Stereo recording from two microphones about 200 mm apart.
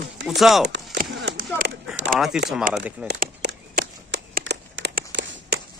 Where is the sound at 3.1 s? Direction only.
55° right (ahead or behind).